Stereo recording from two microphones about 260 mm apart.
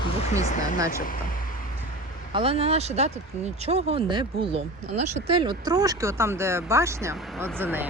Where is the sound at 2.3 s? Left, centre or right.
Right.